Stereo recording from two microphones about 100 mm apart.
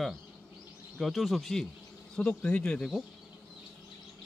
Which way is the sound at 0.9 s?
Centre (ahead or behind).